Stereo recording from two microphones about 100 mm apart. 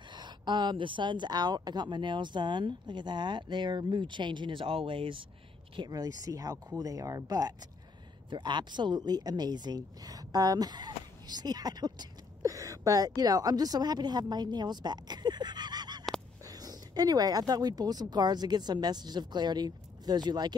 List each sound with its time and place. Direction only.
0.1 s speech: 50° right (ahead or behind)
5.8 s speech: 40° right (ahead or behind)
8.3 s speech: 50° right (ahead or behind)
12.4 s a woman's voice: 35° right (ahead or behind)